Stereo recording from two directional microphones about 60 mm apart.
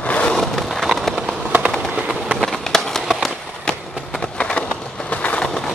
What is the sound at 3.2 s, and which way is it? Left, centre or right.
Run, centre.